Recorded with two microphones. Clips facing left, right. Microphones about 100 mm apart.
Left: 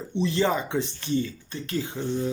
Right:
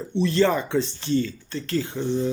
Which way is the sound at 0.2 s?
15° left (ahead or behind).